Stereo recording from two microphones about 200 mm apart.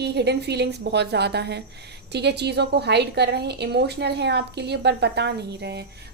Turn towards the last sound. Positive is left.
turn(degrees=-55)  # may be behind; listen again after turning